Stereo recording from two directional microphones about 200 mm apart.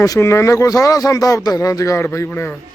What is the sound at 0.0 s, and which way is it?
Speech, 15° left (ahead or behind).